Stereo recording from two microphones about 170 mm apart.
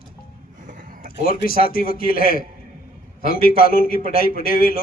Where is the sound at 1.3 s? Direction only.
60° left (ahead or behind).